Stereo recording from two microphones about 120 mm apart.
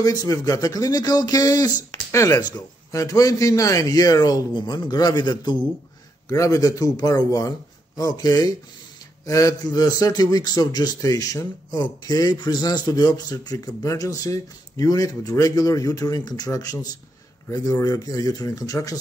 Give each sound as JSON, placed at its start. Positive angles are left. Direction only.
{"t": 0.0, "sound": "speech", "side_deg": 30}
{"t": 6.2, "sound": "speech", "side_deg": 25}